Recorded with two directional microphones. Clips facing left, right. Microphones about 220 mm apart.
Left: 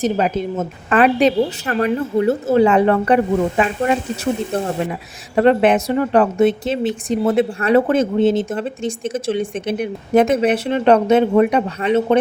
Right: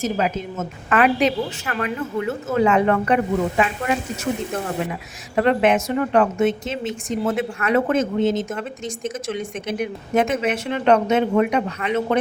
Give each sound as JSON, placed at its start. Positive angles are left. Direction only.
{"t": 0.0, "sound": "a woman's voice", "side_deg": 35}